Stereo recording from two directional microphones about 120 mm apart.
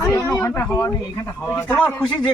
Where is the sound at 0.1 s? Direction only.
30° left (ahead or behind).